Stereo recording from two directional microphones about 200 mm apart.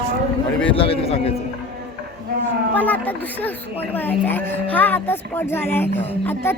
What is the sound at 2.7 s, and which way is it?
Speech, 10° left (ahead or behind).